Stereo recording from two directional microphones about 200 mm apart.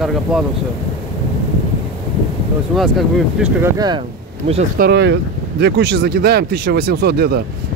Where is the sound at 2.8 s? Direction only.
Centre (ahead or behind).